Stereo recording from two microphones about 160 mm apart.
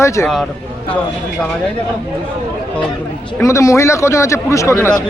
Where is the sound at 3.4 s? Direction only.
20° left (ahead or behind).